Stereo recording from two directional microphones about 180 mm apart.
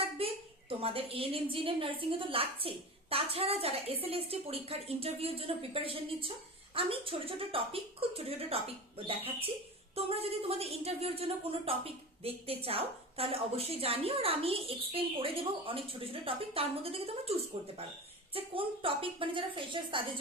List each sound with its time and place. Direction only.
0.0 s a woman's voice: 30° right (ahead or behind)
18.3 s a woman's voice: 30° right (ahead or behind)